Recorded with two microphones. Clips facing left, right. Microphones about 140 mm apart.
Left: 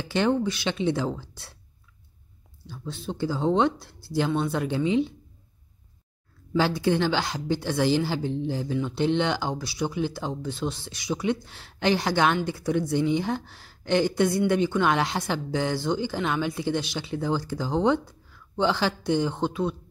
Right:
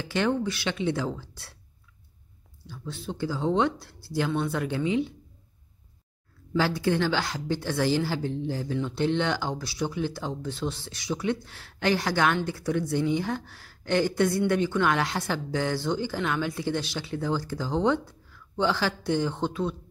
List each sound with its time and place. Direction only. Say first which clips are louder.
0.0 s a woman's voice: left 2 dB; 25° left (ahead or behind)
2.6 s a woman's voice: left 2 dB; 25° left (ahead or behind)
6.6 s a woman's voice: left 2 dB; 20° left (ahead or behind)